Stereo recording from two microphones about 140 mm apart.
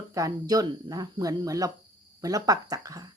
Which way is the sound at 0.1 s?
25° right (ahead or behind).